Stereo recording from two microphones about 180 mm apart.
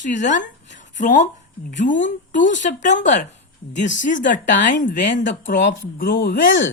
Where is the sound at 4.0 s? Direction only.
45° left (ahead or behind).